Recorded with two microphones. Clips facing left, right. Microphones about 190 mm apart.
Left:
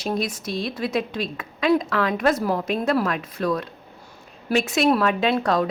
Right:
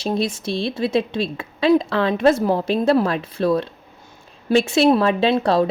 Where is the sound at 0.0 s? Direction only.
25° right (ahead or behind).